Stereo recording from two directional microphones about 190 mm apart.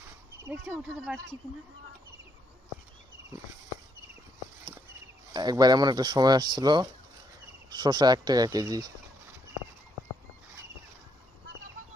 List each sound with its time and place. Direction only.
0.4 s speech: 10° right (ahead or behind)
0.9 s speech: centre (ahead or behind)
5.3 s speech: 20° right (ahead or behind)